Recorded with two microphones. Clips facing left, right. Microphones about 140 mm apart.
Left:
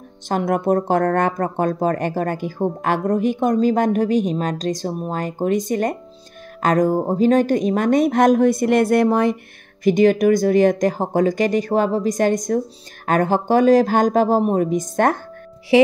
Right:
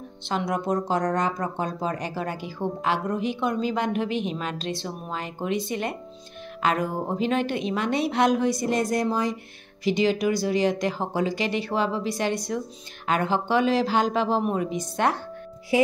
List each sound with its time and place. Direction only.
0.3 s speech: 50° left (ahead or behind)
15.7 s speech: 80° left